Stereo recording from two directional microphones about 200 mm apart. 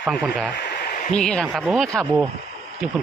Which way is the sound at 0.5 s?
50° left (ahead or behind).